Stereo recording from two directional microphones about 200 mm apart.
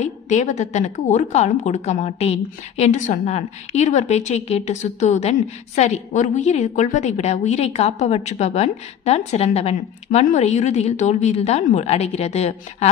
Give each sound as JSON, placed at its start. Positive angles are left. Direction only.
{"t": 0.0, "sound": "a woman's voice", "side_deg": 35}